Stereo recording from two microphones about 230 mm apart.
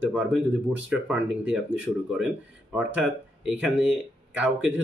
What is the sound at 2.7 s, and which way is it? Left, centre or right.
Speech, centre.